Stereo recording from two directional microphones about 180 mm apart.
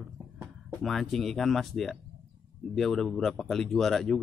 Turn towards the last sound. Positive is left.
turn(degrees=0)  # may be behind; listen again after turning